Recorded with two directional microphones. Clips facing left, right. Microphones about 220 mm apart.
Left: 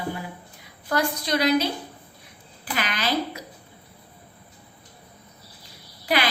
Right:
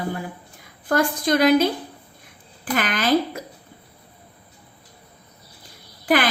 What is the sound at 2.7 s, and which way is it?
Speech, 50° right (ahead or behind).